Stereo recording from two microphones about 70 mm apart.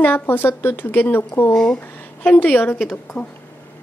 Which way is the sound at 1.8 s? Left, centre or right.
Left.